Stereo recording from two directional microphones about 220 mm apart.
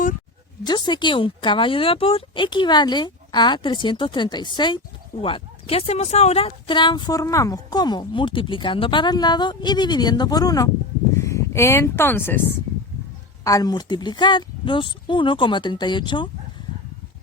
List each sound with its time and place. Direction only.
0.6 s speech: 20° left (ahead or behind)
13.4 s speech: 15° left (ahead or behind)